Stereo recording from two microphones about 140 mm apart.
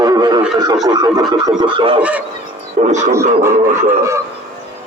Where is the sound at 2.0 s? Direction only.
10° right (ahead or behind).